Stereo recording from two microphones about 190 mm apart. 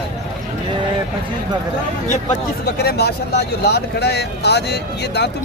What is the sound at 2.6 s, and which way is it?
Speech, 55° left (ahead or behind).